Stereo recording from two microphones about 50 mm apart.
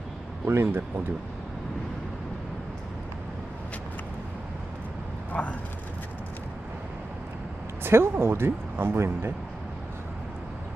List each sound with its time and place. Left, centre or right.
0.4 s speech: right
5.3 s vehicle: left
7.9 s speech: right